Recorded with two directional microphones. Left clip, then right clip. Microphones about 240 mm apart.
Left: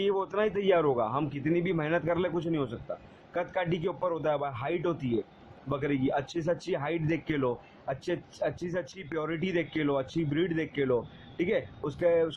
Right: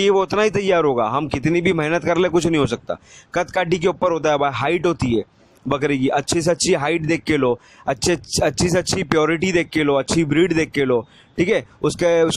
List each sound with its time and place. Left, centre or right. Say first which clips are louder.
0.0 s speech: right 12 dB; right